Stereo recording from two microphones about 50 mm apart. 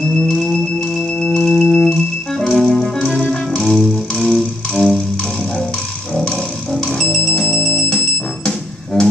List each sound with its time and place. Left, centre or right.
0.2 s music: centre
1.2 s organ: centre
3.2 s music: centre
6.1 s music: centre
8.5 s music: centre